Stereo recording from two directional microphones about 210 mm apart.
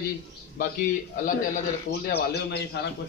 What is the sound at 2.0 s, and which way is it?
Speech, 50° left (ahead or behind).